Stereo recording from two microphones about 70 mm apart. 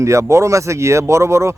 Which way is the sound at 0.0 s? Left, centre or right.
Right.